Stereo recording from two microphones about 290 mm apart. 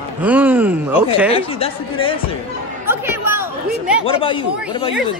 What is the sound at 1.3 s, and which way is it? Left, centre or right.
Speech, centre.